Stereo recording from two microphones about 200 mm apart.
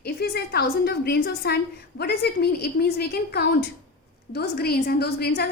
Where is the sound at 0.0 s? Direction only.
55° left (ahead or behind).